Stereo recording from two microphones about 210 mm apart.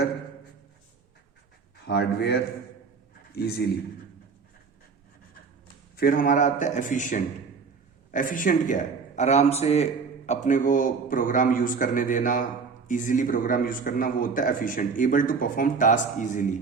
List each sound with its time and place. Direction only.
1.9 s a man's voice: 50° left (ahead or behind)
6.0 s a man's voice: 45° left (ahead or behind)